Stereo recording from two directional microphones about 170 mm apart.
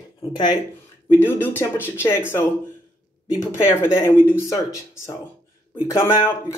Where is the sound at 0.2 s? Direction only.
25° left (ahead or behind).